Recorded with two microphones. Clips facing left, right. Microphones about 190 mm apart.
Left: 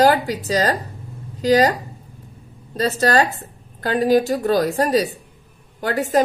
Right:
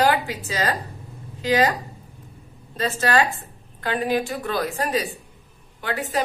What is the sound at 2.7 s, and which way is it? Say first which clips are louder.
A woman's voice: left 4 dB; 40° left (ahead or behind).